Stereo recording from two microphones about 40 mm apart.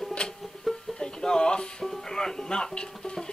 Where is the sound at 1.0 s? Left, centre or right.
Centre.